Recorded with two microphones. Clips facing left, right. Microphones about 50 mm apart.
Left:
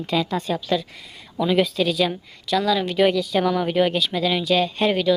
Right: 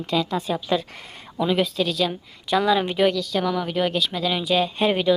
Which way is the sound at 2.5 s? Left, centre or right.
Right.